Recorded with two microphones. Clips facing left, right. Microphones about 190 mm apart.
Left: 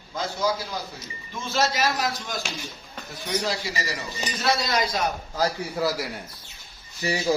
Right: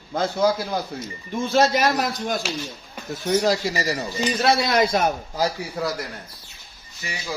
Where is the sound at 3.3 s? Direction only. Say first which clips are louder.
Right 8 dB; 40° right (ahead or behind).